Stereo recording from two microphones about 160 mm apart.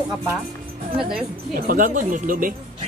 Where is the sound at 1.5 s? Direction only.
60° right (ahead or behind).